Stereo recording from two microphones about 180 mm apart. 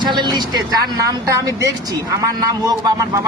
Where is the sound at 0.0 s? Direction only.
25° right (ahead or behind).